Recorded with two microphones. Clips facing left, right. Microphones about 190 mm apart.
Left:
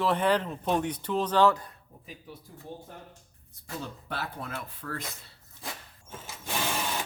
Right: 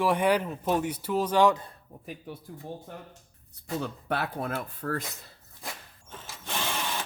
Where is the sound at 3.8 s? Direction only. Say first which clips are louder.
Right 5 dB; 60° right (ahead or behind).